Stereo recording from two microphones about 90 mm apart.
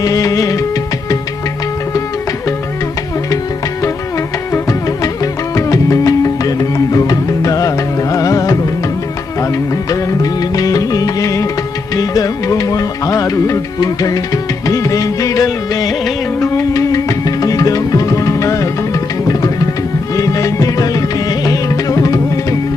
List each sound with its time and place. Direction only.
0.0 s music: 40° left (ahead or behind)
5.2 s music: 40° left (ahead or behind)
9.9 s music: 45° left (ahead or behind)
20.1 s music: 40° left (ahead or behind)